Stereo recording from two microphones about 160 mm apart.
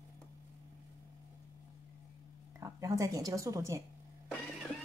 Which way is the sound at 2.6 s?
20° right (ahead or behind).